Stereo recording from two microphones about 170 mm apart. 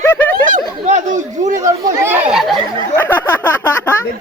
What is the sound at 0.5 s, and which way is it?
Chatter, 45° right (ahead or behind).